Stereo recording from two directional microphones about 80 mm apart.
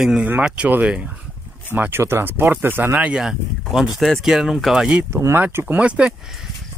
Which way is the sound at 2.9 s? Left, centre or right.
Centre.